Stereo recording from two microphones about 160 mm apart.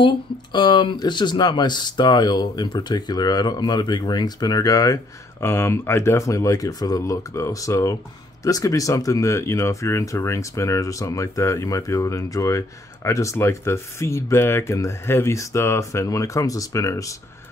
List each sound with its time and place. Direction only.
0.0 s speech: 30° left (ahead or behind)